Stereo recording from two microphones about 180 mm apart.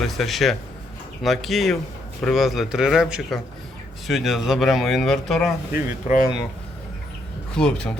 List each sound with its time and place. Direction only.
0.0 s speech: centre (ahead or behind)
5.7 s speech: 50° left (ahead or behind)
7.5 s speech: 5° left (ahead or behind)